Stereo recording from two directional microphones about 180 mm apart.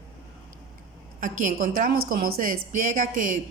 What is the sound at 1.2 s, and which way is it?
A woman's voice, 45° right (ahead or behind).